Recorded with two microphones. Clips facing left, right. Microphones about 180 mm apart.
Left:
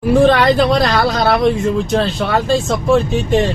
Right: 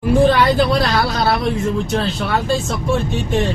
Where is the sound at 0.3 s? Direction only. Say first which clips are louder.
Left 3 dB; 90° left.